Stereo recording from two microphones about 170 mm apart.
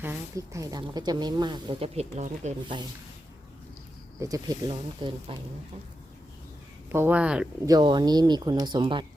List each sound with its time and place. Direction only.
0.0 s speech: 15° right (ahead or behind); by 2.5 s 40° right (ahead or behind)
4.2 s speech: 20° right (ahead or behind)
6.9 s speech: 10° right (ahead or behind)
7.6 s speech: 25° right (ahead or behind)